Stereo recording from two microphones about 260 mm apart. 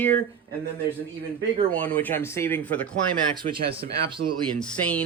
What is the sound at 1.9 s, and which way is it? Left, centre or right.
Speech, centre.